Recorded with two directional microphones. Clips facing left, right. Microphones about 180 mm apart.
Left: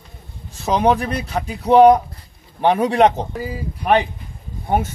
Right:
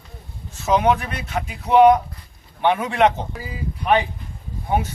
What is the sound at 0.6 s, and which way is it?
Speech, 35° left (ahead or behind).